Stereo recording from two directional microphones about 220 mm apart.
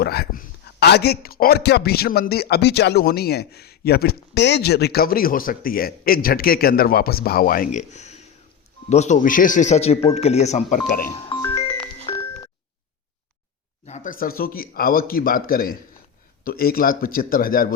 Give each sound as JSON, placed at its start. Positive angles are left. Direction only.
{"t": 0.0, "sound": "a man's voice", "side_deg": 45}
{"t": 10.8, "sound": "speech", "side_deg": 40}
{"t": 11.5, "sound": "music", "side_deg": 25}
{"t": 13.8, "sound": "speech", "side_deg": 35}